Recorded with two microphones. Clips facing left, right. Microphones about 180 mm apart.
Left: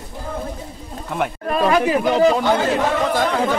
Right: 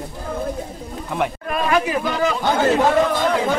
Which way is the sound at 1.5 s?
35° left (ahead or behind).